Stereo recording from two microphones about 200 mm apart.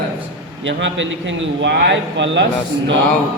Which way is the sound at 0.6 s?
65° right (ahead or behind).